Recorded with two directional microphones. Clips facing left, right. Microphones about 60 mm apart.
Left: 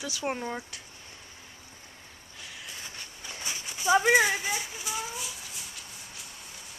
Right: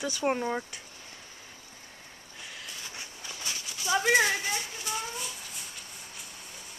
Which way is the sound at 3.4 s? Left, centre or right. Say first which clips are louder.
Left 6 dB; left.